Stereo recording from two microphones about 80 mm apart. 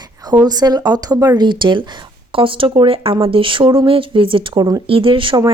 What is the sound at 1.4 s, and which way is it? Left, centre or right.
Speech, right.